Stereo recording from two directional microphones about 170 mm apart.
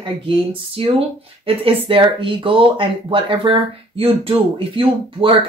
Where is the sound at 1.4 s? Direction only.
30° right (ahead or behind).